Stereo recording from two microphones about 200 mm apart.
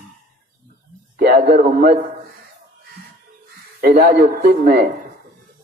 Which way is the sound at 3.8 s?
50° right (ahead or behind).